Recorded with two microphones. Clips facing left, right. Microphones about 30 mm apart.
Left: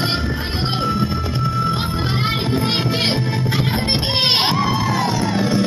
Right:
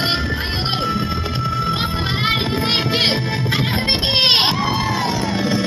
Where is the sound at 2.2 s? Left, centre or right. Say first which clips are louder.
Right 2 dB; right.